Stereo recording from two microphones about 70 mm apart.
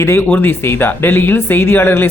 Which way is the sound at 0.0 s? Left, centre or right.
Left.